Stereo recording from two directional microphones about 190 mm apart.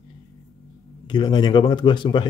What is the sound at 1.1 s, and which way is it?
Speech, 25° left (ahead or behind).